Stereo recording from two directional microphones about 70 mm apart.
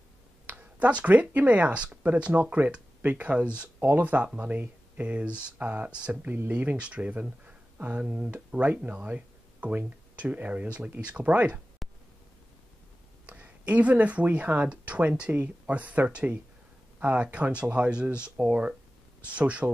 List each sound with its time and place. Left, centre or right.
0.5 s speech: right
7.4 s a sound: right
8.0 s speech: centre
13.3 s speech: centre